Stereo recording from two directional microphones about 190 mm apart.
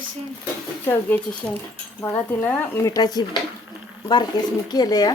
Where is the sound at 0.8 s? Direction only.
10° left (ahead or behind).